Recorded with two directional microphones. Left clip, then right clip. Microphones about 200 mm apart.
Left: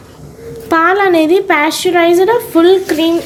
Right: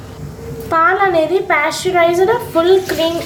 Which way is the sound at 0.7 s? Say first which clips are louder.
Left 2 dB; 45° left (ahead or behind).